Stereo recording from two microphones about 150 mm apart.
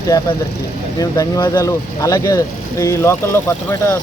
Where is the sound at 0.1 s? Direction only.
30° left (ahead or behind).